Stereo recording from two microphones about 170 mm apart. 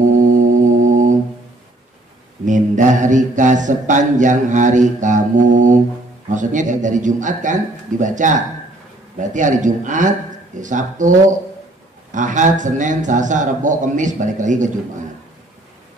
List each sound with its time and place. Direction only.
0.2 s music: 50° right (ahead or behind)
2.4 s mantra: 45° right (ahead or behind)